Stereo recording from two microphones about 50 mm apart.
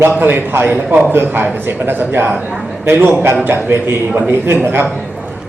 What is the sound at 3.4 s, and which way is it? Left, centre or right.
A man's voice, right.